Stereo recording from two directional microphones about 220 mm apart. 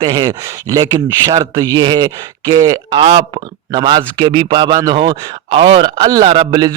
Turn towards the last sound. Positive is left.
turn(degrees=-20)  # may be behind; listen again after turning